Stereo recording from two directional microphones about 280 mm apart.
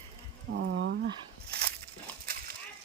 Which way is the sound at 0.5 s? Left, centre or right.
Right.